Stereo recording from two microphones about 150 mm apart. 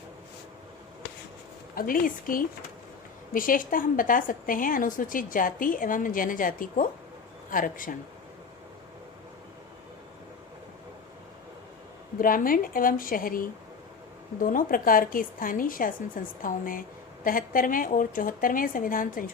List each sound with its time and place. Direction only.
1.7 s a woman's voice: 70° left (ahead or behind)
12.2 s a woman's voice: 65° left (ahead or behind)